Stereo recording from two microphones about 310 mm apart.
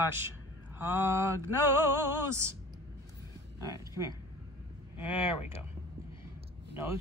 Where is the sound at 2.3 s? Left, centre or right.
Centre.